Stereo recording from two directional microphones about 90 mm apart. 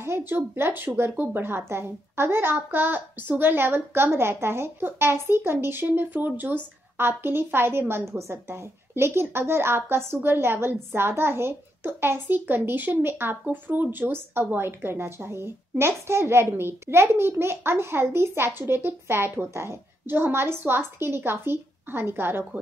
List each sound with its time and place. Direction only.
0.0 s a child's voice: 25° right (ahead or behind)